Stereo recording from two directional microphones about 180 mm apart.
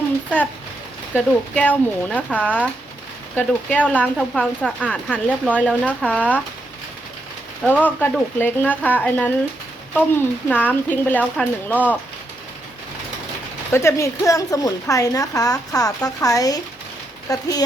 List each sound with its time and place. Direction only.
1.1 s speech: 5° left (ahead or behind)
7.6 s speech: 10° left (ahead or behind)
13.7 s a woman's voice: 15° left (ahead or behind)